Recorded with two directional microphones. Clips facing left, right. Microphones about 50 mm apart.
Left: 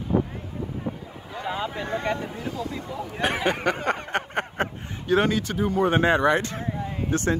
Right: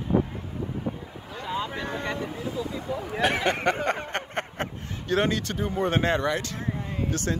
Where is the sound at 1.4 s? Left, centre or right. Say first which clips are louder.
Left 2 dB; centre.